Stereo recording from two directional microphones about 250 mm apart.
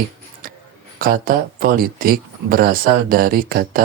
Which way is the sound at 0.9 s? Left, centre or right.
Right.